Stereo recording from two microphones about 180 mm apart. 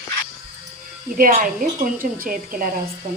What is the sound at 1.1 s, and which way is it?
Speech, 50° right (ahead or behind).